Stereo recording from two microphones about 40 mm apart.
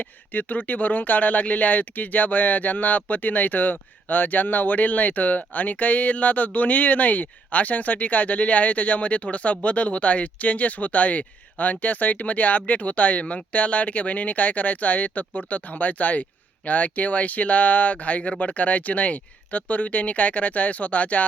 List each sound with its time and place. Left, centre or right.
0.3 s speech: left